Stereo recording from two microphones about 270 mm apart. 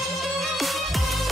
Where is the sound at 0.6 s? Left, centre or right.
Centre.